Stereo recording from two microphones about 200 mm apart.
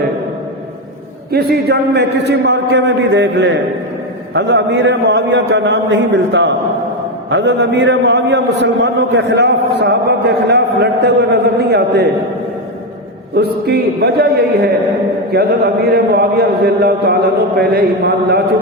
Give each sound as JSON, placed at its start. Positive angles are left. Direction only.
{"t": 1.3, "sound": "a man's voice", "side_deg": -55}
{"t": 13.3, "sound": "a man's voice", "side_deg": -55}